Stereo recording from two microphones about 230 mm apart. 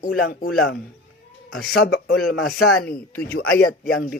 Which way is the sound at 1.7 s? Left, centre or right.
Left.